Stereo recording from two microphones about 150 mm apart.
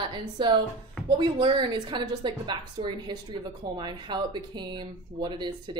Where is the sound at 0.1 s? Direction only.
30° right (ahead or behind).